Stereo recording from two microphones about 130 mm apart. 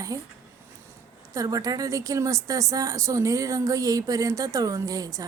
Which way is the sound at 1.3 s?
25° right (ahead or behind).